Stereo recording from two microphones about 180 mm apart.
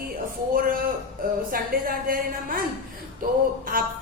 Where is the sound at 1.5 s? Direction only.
50° right (ahead or behind).